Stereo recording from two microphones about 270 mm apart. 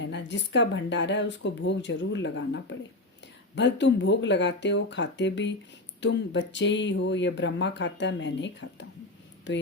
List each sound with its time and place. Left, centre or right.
0.0 s speech: left